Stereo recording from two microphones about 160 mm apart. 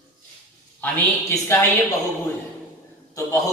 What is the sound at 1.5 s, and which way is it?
Speech, 20° left (ahead or behind).